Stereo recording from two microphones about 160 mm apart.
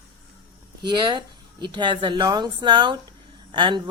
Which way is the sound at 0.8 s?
30° right (ahead or behind).